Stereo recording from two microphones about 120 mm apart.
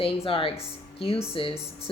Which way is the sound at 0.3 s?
50° left (ahead or behind).